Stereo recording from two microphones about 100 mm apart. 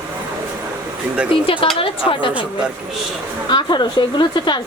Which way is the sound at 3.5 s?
50° left (ahead or behind).